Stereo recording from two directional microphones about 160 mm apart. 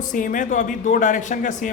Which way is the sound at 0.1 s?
55° left (ahead or behind).